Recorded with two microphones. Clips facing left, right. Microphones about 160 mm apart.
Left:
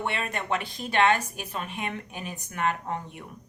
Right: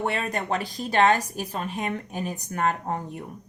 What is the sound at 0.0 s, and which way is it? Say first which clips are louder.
Speech: right 4 dB; 40° right (ahead or behind).